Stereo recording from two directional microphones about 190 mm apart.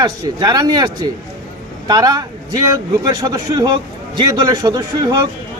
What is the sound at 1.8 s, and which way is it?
Speech, 20° right (ahead or behind).